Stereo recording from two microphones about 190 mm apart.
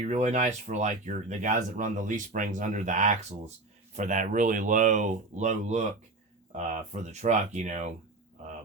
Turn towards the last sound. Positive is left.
turn(degrees=-35)  # may be behind; listen again after turning